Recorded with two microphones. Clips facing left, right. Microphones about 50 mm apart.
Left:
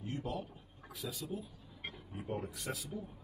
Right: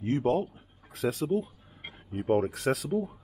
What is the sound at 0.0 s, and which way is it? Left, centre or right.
Speech, right.